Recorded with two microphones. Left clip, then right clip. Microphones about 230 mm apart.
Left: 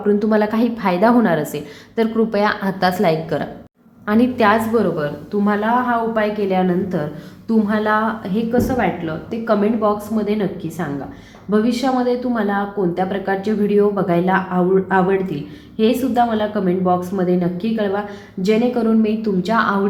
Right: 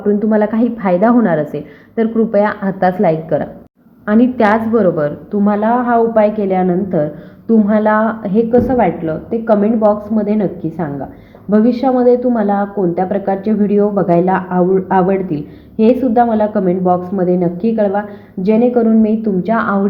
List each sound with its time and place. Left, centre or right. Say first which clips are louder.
0.2 s a woman's voice: right 3 dB; centre